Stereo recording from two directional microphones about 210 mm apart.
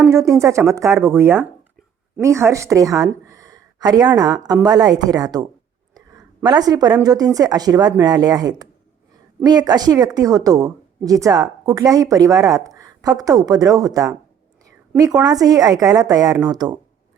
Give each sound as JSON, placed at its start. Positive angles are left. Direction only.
{"t": 0.1, "sound": "a woman's voice", "side_deg": -15}
{"t": 15.2, "sound": "speech", "side_deg": -15}